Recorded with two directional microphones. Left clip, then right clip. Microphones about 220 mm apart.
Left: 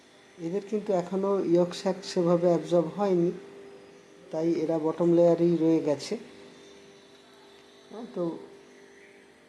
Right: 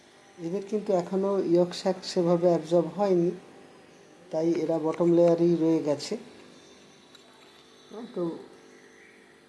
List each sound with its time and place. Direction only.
0.4 s speech: centre (ahead or behind)
4.3 s speech: centre (ahead or behind)